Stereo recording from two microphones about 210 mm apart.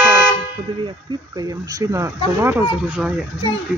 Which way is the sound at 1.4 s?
15° right (ahead or behind).